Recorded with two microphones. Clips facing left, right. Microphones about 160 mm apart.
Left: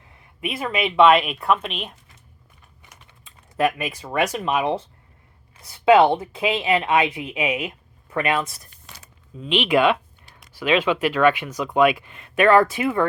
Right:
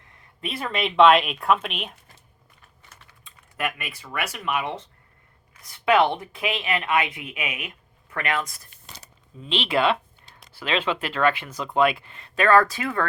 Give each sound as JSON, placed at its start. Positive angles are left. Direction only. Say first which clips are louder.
{"t": 0.6, "sound": "speech", "louder": "left 1 dB", "side_deg": 5}
{"t": 2.9, "sound": "typing", "louder": "left 1 dB", "side_deg": 15}
{"t": 3.6, "sound": "speech", "louder": "left 8 dB", "side_deg": 35}
{"t": 4.4, "sound": "speech", "louder": "left 5 dB", "side_deg": 20}
{"t": 5.8, "sound": "speech", "louder": "left 5 dB", "side_deg": 25}